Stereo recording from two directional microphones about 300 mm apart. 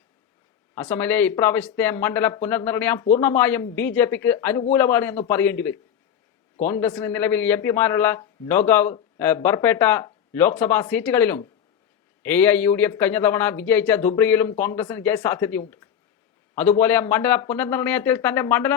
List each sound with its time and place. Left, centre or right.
0.8 s a man's voice: centre